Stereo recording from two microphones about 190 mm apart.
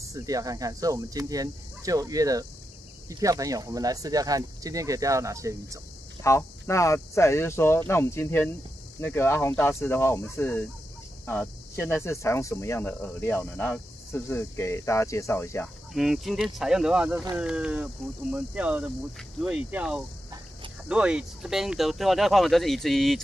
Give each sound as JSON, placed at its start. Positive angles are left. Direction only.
{"t": 0.1, "sound": "speech", "side_deg": -20}
{"t": 6.2, "sound": "speech", "side_deg": 15}
{"t": 15.9, "sound": "speech", "side_deg": 0}